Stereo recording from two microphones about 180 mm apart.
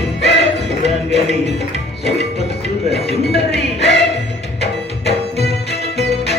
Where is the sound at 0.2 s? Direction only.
70° left (ahead or behind).